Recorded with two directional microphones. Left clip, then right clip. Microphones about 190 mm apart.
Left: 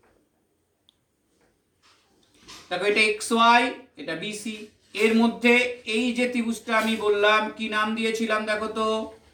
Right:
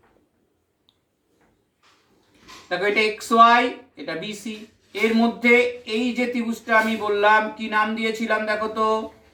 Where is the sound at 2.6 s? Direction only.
15° left (ahead or behind).